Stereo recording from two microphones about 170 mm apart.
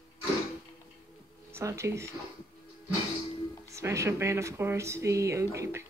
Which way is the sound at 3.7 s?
15° right (ahead or behind).